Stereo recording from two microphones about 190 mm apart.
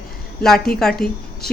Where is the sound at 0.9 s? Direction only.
55° left (ahead or behind).